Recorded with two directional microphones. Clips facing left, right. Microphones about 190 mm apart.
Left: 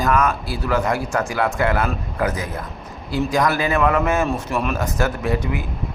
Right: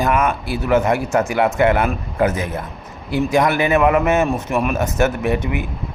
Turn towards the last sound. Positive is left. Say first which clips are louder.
# right 3 dB
turn(degrees=-20)  # may be behind; listen again after turning